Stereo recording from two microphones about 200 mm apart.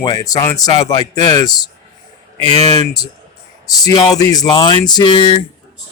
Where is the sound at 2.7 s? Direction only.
20° left (ahead or behind).